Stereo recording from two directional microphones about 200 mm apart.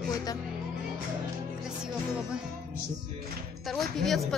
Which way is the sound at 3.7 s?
Centre (ahead or behind).